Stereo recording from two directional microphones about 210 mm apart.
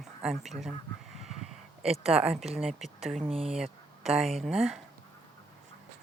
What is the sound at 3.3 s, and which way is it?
Speech, 30° right (ahead or behind).